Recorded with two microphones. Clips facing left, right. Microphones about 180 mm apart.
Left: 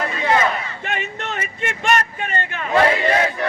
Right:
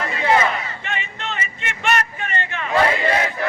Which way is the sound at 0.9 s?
45° left (ahead or behind).